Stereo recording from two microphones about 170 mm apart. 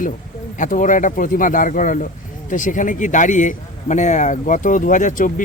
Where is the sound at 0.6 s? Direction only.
50° left (ahead or behind).